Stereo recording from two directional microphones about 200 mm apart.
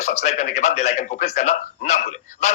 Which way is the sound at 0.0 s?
35° left (ahead or behind).